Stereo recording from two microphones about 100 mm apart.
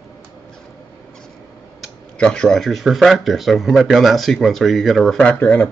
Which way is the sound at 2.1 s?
10° left (ahead or behind).